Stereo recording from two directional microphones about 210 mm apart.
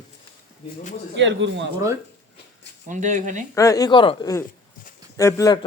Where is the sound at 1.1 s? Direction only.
60° right (ahead or behind).